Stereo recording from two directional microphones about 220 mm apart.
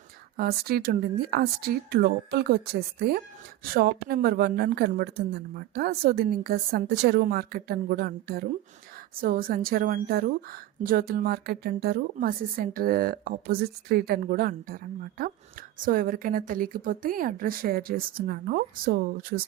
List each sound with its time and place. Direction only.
0.3 s a woman's voice: 45° right (ahead or behind)